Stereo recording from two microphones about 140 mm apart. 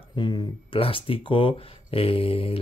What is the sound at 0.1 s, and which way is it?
Speech, 35° left (ahead or behind).